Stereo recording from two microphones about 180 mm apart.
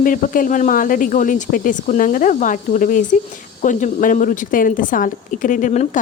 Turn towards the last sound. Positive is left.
turn(degrees=40)  # may be behind; listen again after turning